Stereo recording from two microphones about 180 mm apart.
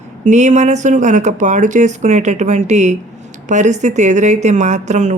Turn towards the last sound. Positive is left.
turn(degrees=-40)  # may be behind; listen again after turning